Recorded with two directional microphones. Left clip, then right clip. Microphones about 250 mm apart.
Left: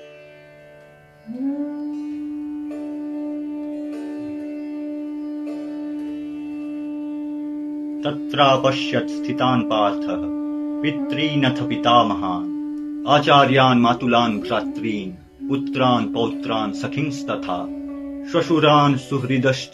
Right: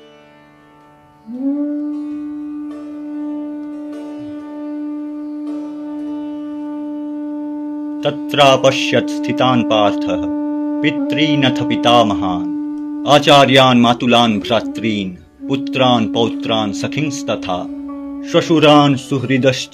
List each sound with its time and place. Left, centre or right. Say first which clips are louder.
8.0 s speech: right 6 dB; right